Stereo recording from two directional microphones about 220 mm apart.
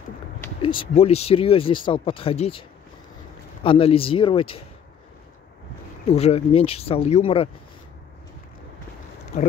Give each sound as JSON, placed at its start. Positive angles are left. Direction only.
{"t": 0.6, "sound": "speech", "side_deg": 25}
{"t": 3.6, "sound": "speech", "side_deg": 25}
{"t": 6.0, "sound": "speech", "side_deg": 25}